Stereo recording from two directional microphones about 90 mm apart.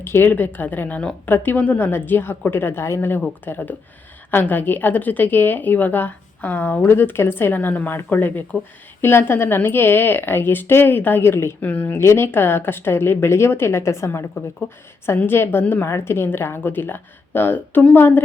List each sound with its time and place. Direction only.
0.0 s speech: 25° left (ahead or behind)